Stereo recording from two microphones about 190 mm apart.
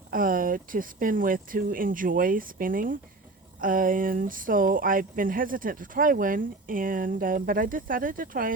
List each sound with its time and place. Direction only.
0.1 s speech: 45° right (ahead or behind)